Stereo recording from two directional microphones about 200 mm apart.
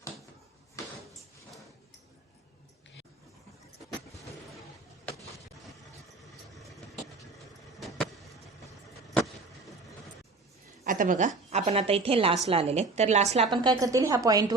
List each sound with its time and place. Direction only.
7.8 s vehicle: centre (ahead or behind)
10.8 s a woman's voice: 40° right (ahead or behind); by 14.5 s 20° right (ahead or behind)